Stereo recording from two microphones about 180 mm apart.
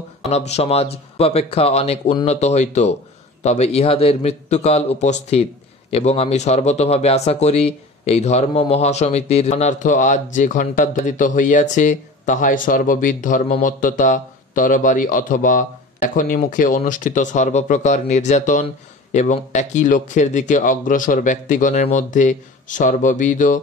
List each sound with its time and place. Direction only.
0.3 s a man's voice: 35° left (ahead or behind)